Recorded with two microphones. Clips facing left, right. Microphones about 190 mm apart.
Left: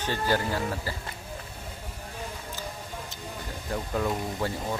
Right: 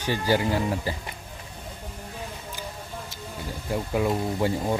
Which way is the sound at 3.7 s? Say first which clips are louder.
Right 4 dB; 15° right (ahead or behind).